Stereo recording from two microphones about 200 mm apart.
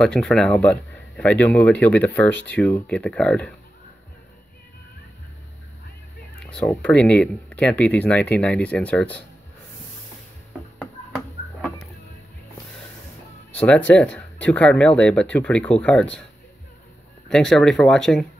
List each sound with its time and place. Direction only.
0.0 s a man's voice: 5° left (ahead or behind)
6.4 s a man's voice: 5° left (ahead or behind)
13.5 s a man's voice: 5° left (ahead or behind)
17.3 s speech: 5° left (ahead or behind)